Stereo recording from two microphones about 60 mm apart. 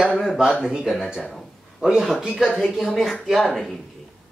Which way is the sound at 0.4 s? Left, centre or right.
Centre.